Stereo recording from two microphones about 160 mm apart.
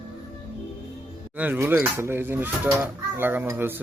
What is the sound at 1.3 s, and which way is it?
Speech, 10° right (ahead or behind).